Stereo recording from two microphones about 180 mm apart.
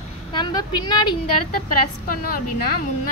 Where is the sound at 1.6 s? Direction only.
55° left (ahead or behind).